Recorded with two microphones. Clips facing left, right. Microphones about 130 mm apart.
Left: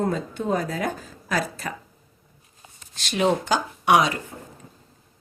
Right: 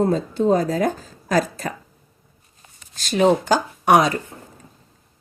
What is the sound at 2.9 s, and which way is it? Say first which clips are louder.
Speech: right 5 dB; 40° right (ahead or behind).